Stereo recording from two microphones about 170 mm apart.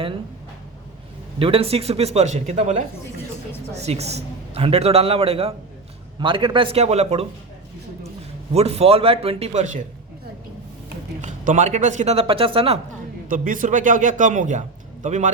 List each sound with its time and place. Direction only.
1.4 s a man's voice: 35° right (ahead or behind)
8.5 s a man's voice: 35° right (ahead or behind)
11.2 s speech: 45° right (ahead or behind)
13.2 s speech: 50° right (ahead or behind)